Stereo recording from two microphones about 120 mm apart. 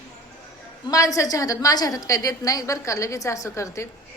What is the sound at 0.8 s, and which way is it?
A woman's voice, 30° left (ahead or behind).